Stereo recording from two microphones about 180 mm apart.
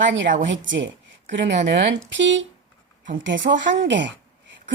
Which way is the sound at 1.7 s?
70° right (ahead or behind).